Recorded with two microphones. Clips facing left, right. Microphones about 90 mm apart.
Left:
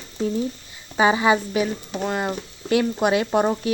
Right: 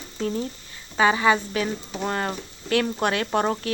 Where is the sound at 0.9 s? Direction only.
20° left (ahead or behind).